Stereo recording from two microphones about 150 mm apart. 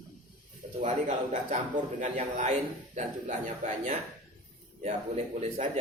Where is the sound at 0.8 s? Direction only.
55° right (ahead or behind).